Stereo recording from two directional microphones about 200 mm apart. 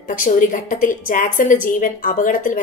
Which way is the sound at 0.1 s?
40° left (ahead or behind).